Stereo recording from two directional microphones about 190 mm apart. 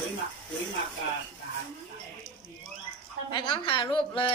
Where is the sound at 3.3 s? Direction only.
25° left (ahead or behind).